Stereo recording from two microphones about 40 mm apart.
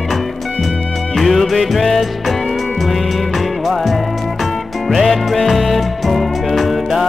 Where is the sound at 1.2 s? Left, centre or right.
Centre.